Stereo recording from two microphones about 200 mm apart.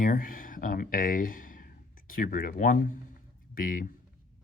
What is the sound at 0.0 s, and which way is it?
Speech, 45° left (ahead or behind).